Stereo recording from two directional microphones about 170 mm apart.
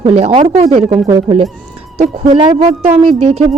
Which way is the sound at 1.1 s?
20° right (ahead or behind).